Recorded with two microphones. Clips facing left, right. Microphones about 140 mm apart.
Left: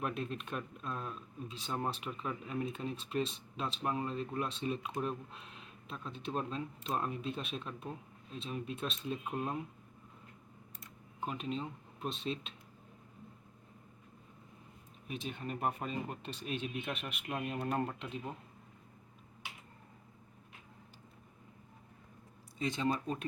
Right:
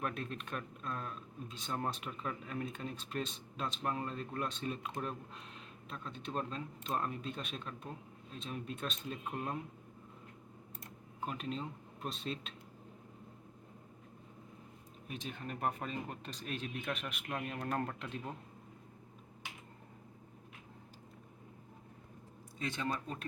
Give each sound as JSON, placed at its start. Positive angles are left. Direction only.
{"t": 0.0, "sound": "speech", "side_deg": 0}
{"t": 11.2, "sound": "speech", "side_deg": 0}
{"t": 15.0, "sound": "speech", "side_deg": 0}
{"t": 22.6, "sound": "speech", "side_deg": 20}